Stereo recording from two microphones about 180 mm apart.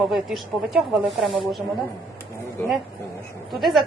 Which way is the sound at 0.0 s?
Centre (ahead or behind).